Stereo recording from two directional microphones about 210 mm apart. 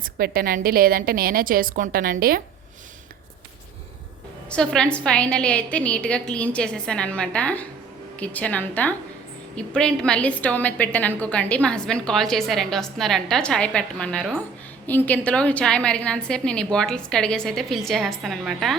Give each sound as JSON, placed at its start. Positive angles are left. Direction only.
{"t": 0.0, "sound": "a woman's voice", "side_deg": -45}
{"t": 4.4, "sound": "a woman's voice", "side_deg": 5}